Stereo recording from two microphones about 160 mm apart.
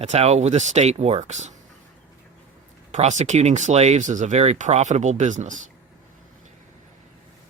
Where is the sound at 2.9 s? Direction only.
45° right (ahead or behind).